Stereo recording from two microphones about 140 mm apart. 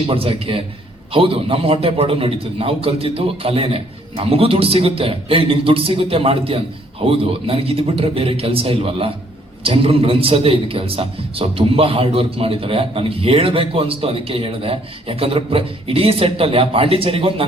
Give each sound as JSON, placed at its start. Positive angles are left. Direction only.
{"t": 0.1, "sound": "a man's voice", "side_deg": -40}